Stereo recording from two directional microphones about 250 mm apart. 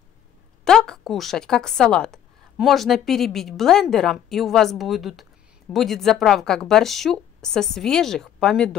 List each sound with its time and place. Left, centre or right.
0.7 s a woman's voice: centre